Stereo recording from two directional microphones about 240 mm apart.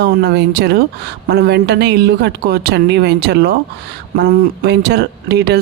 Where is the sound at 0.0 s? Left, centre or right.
Right.